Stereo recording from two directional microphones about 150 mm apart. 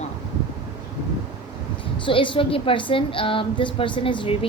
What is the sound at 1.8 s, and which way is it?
A woman's voice, 35° left (ahead or behind).